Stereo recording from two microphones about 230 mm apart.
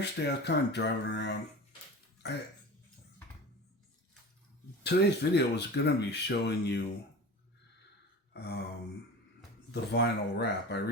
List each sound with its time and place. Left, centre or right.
0.0 s speech: left
4.8 s speech: left
8.3 s gasp: left
9.7 s speech: left